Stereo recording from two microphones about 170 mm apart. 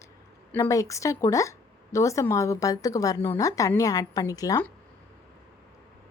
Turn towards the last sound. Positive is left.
turn(degrees=20)  # may be behind; listen again after turning